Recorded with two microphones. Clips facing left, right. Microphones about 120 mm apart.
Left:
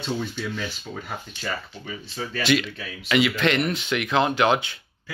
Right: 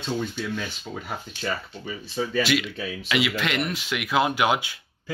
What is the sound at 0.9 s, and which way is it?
Speech, 5° right (ahead or behind).